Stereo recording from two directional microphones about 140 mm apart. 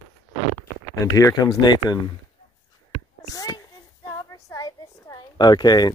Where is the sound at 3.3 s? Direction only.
25° left (ahead or behind).